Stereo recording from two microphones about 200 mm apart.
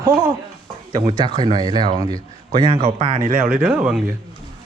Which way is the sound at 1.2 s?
20° right (ahead or behind).